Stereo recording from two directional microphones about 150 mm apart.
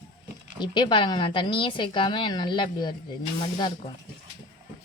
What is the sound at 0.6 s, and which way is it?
A woman's voice, 30° left (ahead or behind).